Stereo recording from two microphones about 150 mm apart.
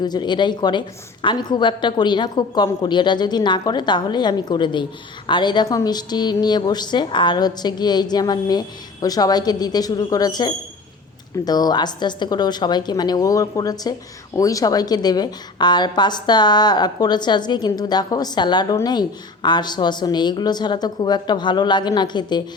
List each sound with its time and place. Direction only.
0.0 s a woman's voice: 30° left (ahead or behind)